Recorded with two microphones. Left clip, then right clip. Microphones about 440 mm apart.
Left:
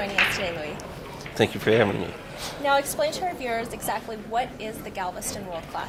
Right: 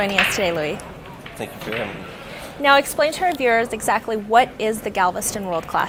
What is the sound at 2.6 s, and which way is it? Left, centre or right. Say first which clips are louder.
A woman's voice: right 7 dB; right.